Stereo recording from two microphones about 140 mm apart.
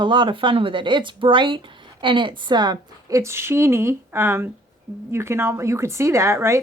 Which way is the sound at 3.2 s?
20° right (ahead or behind).